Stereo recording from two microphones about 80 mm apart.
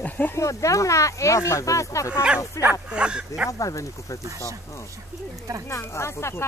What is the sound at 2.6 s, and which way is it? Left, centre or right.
Speech, left.